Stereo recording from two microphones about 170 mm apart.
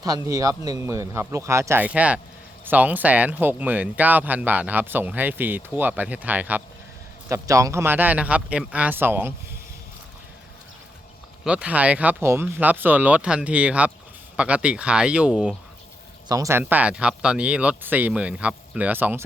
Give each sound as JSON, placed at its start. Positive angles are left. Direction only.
{"t": 0.0, "sound": "speech", "side_deg": -20}
{"t": 11.4, "sound": "speech", "side_deg": -5}
{"t": 16.3, "sound": "speech", "side_deg": -15}